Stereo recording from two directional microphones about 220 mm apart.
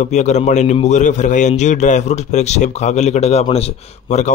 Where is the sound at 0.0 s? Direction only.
30° left (ahead or behind).